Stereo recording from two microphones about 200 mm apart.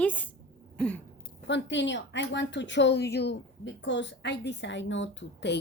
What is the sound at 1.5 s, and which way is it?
A woman's voice, 65° left (ahead or behind).